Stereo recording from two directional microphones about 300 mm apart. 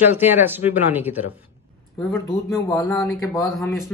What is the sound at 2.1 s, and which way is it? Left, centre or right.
Speech, centre.